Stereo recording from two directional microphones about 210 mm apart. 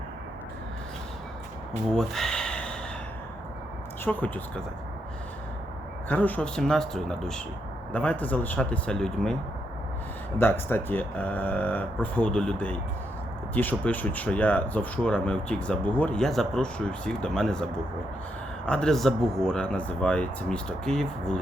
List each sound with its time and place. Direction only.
1.9 s a sound: centre (ahead or behind)
4.0 s speech: 10° left (ahead or behind)
6.1 s speech: 10° left (ahead or behind)